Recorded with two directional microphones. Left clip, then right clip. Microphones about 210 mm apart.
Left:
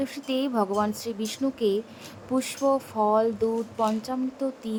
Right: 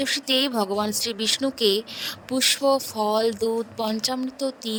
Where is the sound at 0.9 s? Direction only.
45° right (ahead or behind).